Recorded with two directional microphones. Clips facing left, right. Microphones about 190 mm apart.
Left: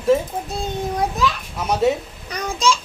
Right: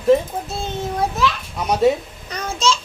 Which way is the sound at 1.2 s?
Centre (ahead or behind).